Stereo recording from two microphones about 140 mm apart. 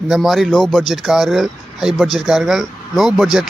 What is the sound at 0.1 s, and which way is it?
Speech, centre (ahead or behind).